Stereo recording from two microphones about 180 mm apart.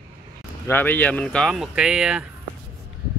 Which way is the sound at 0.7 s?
10° left (ahead or behind).